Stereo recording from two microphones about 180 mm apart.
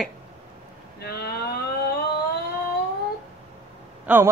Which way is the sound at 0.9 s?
60° left (ahead or behind).